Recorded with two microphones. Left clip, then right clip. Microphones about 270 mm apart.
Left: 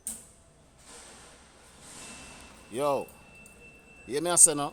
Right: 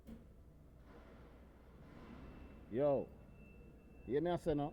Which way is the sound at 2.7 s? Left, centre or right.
Centre.